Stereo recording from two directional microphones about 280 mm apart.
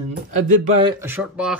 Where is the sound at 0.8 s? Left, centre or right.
Centre.